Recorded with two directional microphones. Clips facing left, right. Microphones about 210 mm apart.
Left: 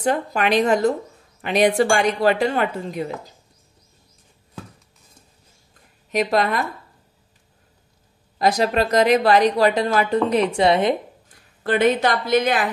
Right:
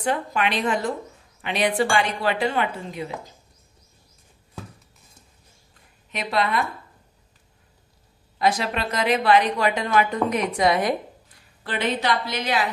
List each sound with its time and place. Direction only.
0.0 s speech: 40° left (ahead or behind)
6.1 s speech: 45° left (ahead or behind)
8.4 s a woman's voice: 40° left (ahead or behind)
11.6 s speech: 50° left (ahead or behind)